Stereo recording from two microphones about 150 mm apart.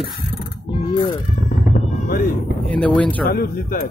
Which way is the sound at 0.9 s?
35° left (ahead or behind).